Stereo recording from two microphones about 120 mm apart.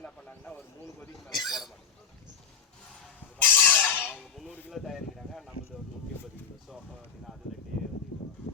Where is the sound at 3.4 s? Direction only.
15° left (ahead or behind).